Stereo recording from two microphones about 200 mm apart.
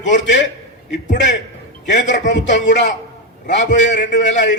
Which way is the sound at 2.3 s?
60° left (ahead or behind).